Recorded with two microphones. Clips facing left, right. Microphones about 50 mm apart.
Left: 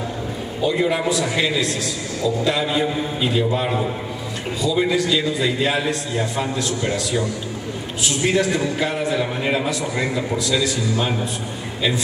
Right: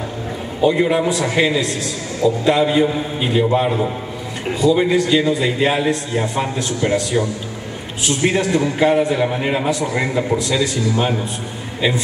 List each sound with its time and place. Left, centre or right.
0.6 s a man's voice: right